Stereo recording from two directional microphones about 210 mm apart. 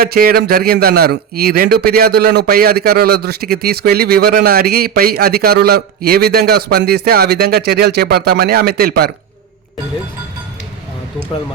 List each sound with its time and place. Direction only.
0.0 s a man's voice: 45° right (ahead or behind)